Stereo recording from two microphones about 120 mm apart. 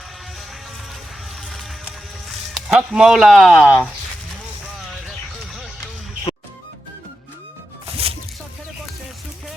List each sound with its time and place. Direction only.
1.5 s music: centre (ahead or behind)
2.6 s speech: 5° right (ahead or behind)
3.5 s speech: 20° left (ahead or behind)
7.9 s music: 50° right (ahead or behind)